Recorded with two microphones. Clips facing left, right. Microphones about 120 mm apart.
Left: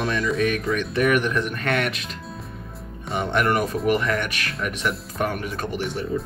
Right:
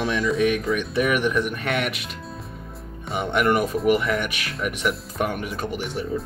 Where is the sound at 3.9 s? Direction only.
10° right (ahead or behind).